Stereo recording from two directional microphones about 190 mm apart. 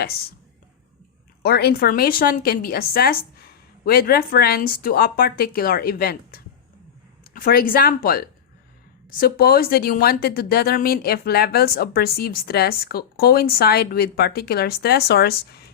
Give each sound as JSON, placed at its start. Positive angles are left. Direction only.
{"t": 0.0, "sound": "speech", "side_deg": 55}
{"t": 1.4, "sound": "speech", "side_deg": 55}